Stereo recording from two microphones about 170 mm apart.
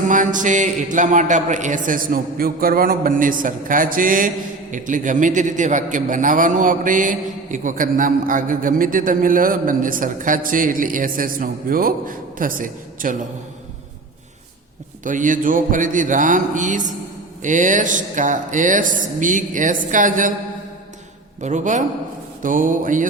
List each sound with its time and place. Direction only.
0.1 s a man's voice: 50° right (ahead or behind)
15.0 s a man's voice: 50° right (ahead or behind)
21.4 s a man's voice: 45° right (ahead or behind)